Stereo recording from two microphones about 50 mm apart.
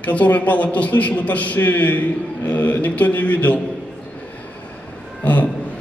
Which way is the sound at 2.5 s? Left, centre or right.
Left.